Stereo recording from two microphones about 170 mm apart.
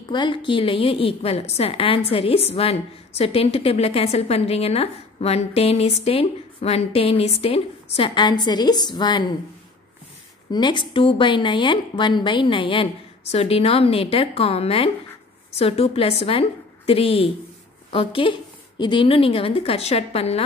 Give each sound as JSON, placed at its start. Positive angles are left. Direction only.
{"t": 0.1, "sound": "a woman's voice", "side_deg": 30}
{"t": 10.5, "sound": "a woman's voice", "side_deg": 25}